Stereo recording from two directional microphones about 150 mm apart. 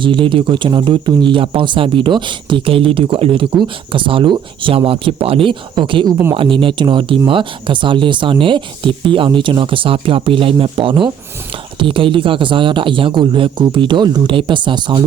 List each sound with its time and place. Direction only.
0.0 s speech: 35° right (ahead or behind)